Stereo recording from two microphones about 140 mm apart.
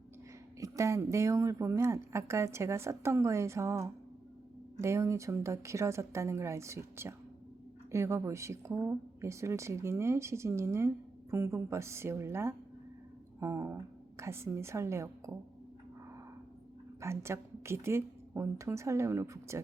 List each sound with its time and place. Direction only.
0.6 s a woman's voice: 20° right (ahead or behind)
17.0 s a woman's voice: 20° right (ahead or behind)